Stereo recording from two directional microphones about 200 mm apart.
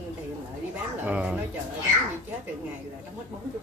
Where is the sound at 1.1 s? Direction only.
5° right (ahead or behind).